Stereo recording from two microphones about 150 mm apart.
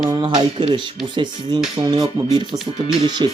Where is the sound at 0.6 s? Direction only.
30° right (ahead or behind).